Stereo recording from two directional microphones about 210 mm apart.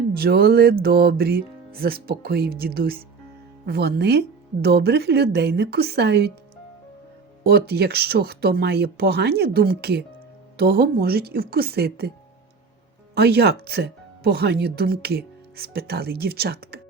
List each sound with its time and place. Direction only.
0.1 s speech: 45° right (ahead or behind)
7.4 s speech: 50° right (ahead or behind)
13.1 s speech: 50° right (ahead or behind)